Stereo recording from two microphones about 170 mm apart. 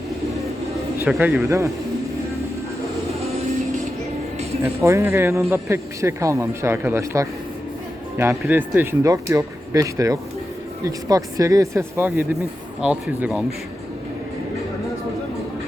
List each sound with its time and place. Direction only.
1.0 s speech: 10° right (ahead or behind)
4.6 s speech: 15° right (ahead or behind)